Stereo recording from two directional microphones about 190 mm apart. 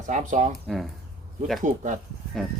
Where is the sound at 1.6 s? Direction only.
40° right (ahead or behind).